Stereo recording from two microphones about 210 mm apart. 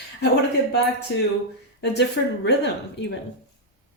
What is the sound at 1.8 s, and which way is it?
A woman's voice, 55° left (ahead or behind).